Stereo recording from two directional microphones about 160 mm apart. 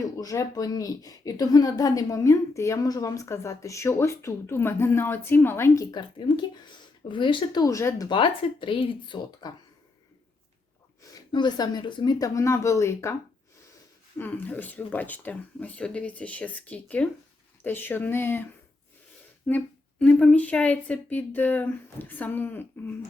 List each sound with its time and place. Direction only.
0.2 s speech: 20° left (ahead or behind)
8.1 s speech: 30° left (ahead or behind)
11.0 s speech: 25° left (ahead or behind)
14.2 s a woman's voice: 10° left (ahead or behind)
19.5 s a woman's voice: 10° left (ahead or behind)